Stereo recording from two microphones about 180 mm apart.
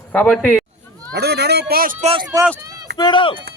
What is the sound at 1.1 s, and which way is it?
Speech, 65° right (ahead or behind).